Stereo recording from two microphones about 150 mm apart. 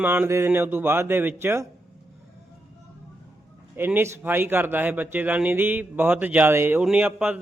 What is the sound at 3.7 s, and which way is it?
A man's voice, 15° right (ahead or behind).